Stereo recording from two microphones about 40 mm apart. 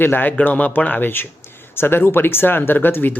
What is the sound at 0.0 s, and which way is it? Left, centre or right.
Speech, left.